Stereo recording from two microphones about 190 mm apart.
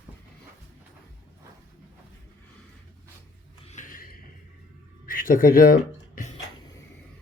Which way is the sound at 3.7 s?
45° left (ahead or behind).